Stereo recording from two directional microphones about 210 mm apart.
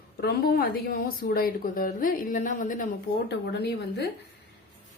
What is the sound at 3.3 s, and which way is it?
Speech, 50° left (ahead or behind).